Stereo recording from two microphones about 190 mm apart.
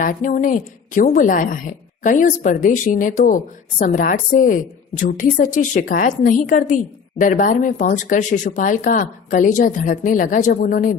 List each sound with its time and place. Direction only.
0.0 s a woman's voice: 45° left (ahead or behind)